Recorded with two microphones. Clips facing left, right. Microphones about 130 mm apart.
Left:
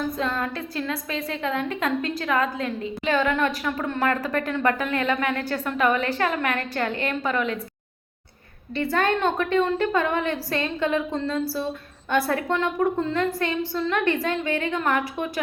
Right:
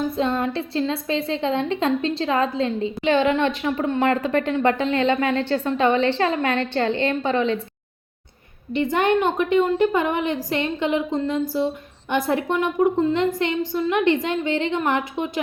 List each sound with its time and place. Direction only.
0.2 s a woman's voice: 25° right (ahead or behind)
8.7 s a woman's voice: 20° right (ahead or behind)